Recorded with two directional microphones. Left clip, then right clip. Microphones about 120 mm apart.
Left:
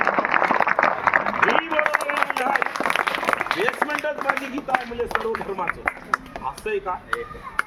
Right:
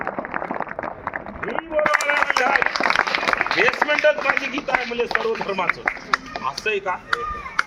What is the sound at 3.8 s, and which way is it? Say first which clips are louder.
Run: right 4 dB; 30° right (ahead or behind).